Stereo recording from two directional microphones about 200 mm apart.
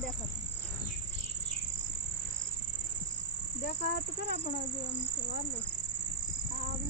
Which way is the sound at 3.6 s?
55° left (ahead or behind).